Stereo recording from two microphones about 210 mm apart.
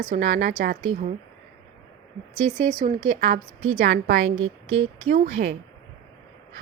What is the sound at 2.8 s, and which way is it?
Speech, 30° right (ahead or behind).